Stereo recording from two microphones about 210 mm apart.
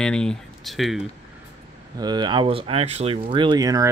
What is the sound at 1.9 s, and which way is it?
Speech, 20° right (ahead or behind).